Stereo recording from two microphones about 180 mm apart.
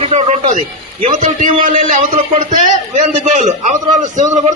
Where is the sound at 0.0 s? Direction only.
40° right (ahead or behind).